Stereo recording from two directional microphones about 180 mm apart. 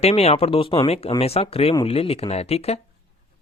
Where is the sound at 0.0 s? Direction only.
35° left (ahead or behind).